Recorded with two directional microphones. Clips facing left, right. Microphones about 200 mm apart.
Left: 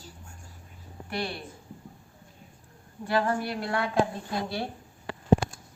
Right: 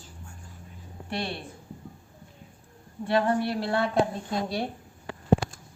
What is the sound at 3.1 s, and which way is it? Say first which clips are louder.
Speech: right 3 dB; 25° right (ahead or behind).